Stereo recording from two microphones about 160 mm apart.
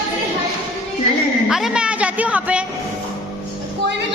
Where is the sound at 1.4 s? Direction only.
5° right (ahead or behind).